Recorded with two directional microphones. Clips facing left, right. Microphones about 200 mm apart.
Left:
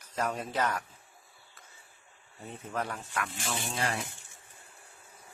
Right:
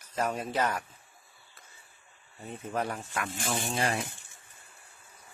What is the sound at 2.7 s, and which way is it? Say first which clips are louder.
Speech: right 2 dB; 20° right (ahead or behind).